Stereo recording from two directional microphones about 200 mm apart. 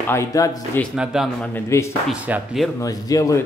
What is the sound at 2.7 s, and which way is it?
Speech, 15° left (ahead or behind).